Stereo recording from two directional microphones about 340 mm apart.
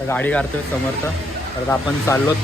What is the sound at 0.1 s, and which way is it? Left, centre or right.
Speech, centre.